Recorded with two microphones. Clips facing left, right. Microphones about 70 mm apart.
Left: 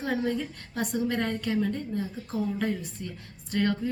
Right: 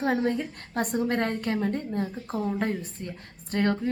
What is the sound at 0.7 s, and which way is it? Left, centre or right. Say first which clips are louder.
A woman's voice: right 2 dB; right.